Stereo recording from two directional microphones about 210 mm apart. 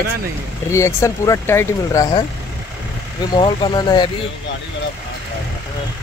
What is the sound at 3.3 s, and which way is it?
Speech, 20° left (ahead or behind).